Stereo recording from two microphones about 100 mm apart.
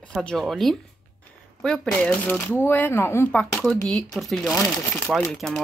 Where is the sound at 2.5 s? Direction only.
20° left (ahead or behind).